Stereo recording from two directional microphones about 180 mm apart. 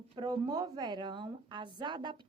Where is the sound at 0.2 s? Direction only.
25° right (ahead or behind).